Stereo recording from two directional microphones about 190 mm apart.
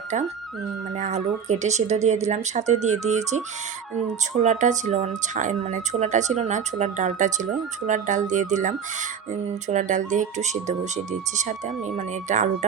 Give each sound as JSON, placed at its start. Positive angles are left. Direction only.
{"t": 0.9, "sound": "speech", "side_deg": -40}
{"t": 4.4, "sound": "speech", "side_deg": -40}